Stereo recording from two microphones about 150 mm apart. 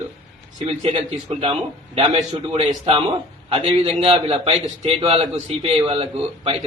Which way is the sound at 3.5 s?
40° right (ahead or behind).